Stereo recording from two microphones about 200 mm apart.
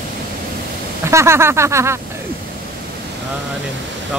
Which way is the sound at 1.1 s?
15° right (ahead or behind).